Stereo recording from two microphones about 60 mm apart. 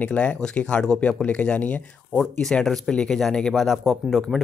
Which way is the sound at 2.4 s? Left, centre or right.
Centre.